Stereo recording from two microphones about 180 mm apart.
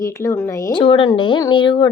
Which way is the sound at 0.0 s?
15° left (ahead or behind).